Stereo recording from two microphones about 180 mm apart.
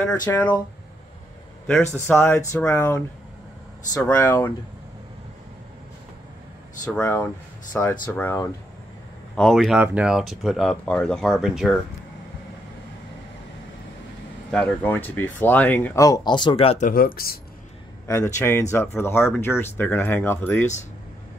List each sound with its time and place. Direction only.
0.1 s speech: 15° left (ahead or behind)
1.7 s speech: 10° left (ahead or behind)
4.0 s speech: 10° left (ahead or behind)
6.9 s speech: 10° left (ahead or behind)
14.5 s speech: 5° left (ahead or behind); by 16.8 s 30° left (ahead or behind)
16.8 s speech: 50° left (ahead or behind)
18.0 s speech: 15° left (ahead or behind)